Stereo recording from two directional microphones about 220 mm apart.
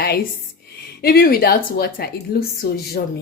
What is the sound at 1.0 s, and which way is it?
A woman's voice, 45° left (ahead or behind).